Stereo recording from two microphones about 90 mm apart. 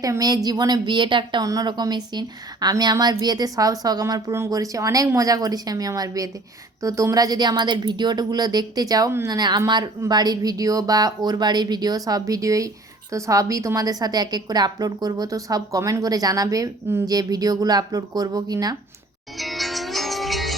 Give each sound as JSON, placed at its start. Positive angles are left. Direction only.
{"t": 0.0, "sound": "speech", "side_deg": -45}
{"t": 1.5, "sound": "speech", "side_deg": -50}
{"t": 19.4, "sound": "music", "side_deg": 0}